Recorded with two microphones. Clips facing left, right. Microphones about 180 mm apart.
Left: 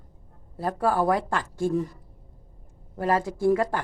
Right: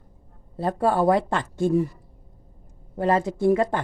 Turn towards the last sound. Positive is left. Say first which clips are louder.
# right 2 dB
turn(degrees=-20)  # may be behind; listen again after turning